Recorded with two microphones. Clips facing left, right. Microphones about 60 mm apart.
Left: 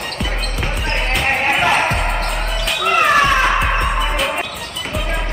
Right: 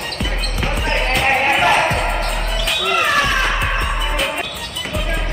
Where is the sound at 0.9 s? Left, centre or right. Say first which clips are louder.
Right 2 dB; centre.